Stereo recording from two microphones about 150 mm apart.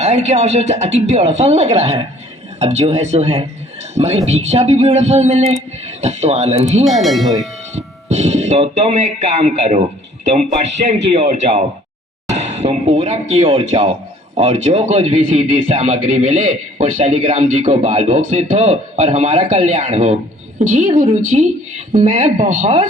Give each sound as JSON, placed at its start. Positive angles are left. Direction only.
{"t": 0.0, "sound": "speech", "side_deg": -50}
{"t": 6.8, "sound": "speech", "side_deg": 0}
{"t": 7.8, "sound": "speech", "side_deg": -50}
{"t": 10.8, "sound": "speech", "side_deg": -45}